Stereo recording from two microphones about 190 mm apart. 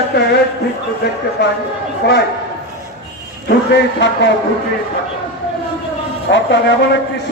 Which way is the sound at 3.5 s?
65° left (ahead or behind).